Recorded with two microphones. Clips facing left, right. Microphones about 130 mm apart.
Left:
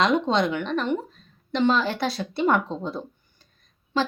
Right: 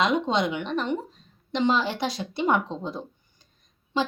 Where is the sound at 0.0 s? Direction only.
10° right (ahead or behind).